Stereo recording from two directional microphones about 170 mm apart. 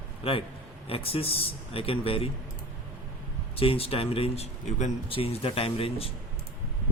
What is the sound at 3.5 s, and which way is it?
Speech, 35° left (ahead or behind).